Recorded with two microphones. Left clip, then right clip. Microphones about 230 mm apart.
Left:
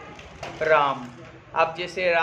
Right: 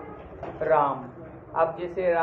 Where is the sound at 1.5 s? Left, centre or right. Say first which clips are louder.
Left 2 dB; left.